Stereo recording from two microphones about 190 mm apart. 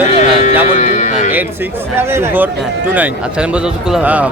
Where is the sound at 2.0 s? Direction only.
10° right (ahead or behind).